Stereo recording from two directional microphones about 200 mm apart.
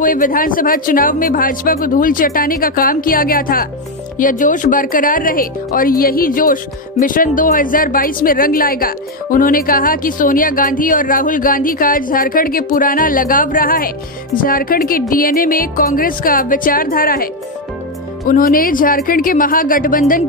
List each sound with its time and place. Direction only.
0.0 s speech: 45° left (ahead or behind)